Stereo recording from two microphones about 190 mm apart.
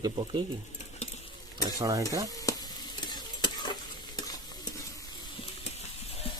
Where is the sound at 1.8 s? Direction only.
20° right (ahead or behind).